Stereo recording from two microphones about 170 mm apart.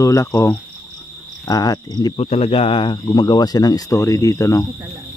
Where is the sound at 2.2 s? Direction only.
35° left (ahead or behind).